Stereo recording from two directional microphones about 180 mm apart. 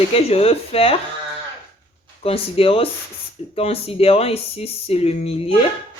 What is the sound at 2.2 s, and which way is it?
Speech, 30° left (ahead or behind).